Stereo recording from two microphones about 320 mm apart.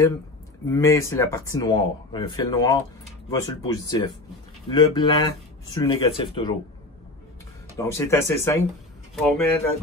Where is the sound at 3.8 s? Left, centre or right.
Centre.